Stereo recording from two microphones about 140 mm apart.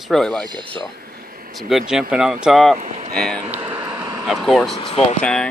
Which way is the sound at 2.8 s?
55° right (ahead or behind).